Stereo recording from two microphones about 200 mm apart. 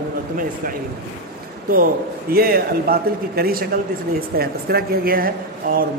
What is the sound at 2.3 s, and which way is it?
Speech, 50° right (ahead or behind).